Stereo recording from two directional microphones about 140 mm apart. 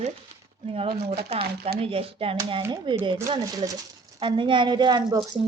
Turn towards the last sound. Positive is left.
turn(degrees=-30)  # may be behind; listen again after turning